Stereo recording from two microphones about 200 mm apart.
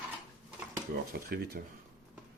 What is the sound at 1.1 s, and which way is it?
Speech, 50° right (ahead or behind).